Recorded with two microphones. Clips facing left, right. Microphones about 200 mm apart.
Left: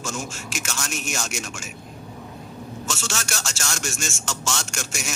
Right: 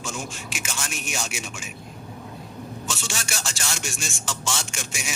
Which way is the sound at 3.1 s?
10° right (ahead or behind).